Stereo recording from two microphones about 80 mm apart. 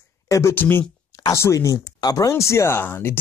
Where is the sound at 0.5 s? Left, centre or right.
Left.